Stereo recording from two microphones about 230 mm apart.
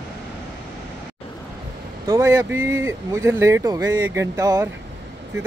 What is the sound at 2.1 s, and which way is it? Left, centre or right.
Speech, centre.